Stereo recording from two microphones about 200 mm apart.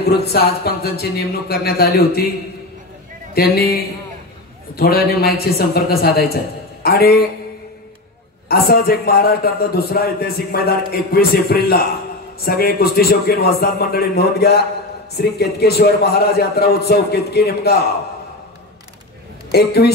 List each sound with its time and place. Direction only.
0.0 s a man's voice: 50° left (ahead or behind)
3.3 s a man's voice: 50° left (ahead or behind)
8.5 s a man's voice: 50° left (ahead or behind)
19.5 s a man's voice: 50° left (ahead or behind)